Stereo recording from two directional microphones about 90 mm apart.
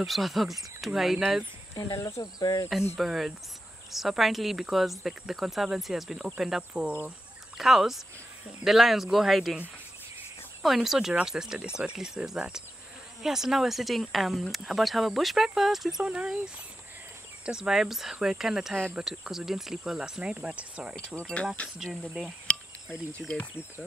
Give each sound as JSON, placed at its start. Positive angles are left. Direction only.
{"t": 0.0, "sound": "speech", "side_deg": 0}
{"t": 1.8, "sound": "speech", "side_deg": 35}
{"t": 2.7, "sound": "speech", "side_deg": -5}
{"t": 10.6, "sound": "speech", "side_deg": 0}
{"t": 17.5, "sound": "speech", "side_deg": -5}
{"t": 21.2, "sound": "speech", "side_deg": 10}
{"t": 22.5, "sound": "cricket", "side_deg": 10}
{"t": 23.2, "sound": "speech", "side_deg": -5}